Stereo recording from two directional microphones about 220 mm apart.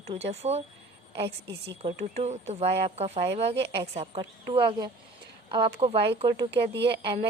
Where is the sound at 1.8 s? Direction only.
30° right (ahead or behind).